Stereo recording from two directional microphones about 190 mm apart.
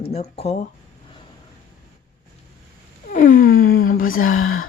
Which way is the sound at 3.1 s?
45° left (ahead or behind).